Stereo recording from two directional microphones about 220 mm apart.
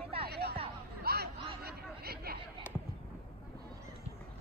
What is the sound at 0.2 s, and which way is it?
Music, 45° right (ahead or behind).